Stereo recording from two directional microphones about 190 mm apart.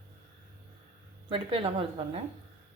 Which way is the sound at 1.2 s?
25° right (ahead or behind).